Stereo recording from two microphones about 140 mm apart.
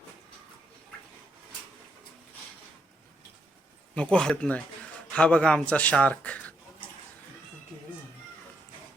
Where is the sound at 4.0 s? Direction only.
5° left (ahead or behind).